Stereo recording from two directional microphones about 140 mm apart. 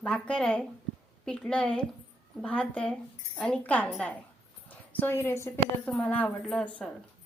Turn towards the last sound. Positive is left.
turn(degrees=5)  # may be behind; listen again after turning